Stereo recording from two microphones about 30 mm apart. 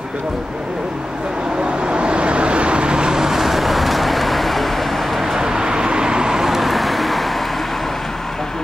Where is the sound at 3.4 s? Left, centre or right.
Centre.